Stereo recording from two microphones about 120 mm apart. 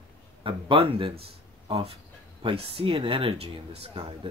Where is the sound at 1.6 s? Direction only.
60° right (ahead or behind).